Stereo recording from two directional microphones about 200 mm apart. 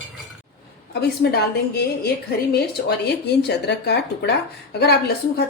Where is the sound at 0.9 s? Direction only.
55° left (ahead or behind).